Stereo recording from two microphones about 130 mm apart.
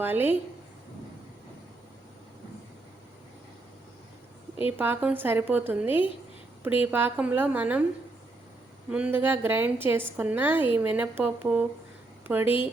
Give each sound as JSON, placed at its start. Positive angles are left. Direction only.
{"t": 0.0, "sound": "a woman's voice", "side_deg": -15}
{"t": 4.8, "sound": "a woman's voice", "side_deg": -10}
{"t": 8.9, "sound": "a woman's voice", "side_deg": -10}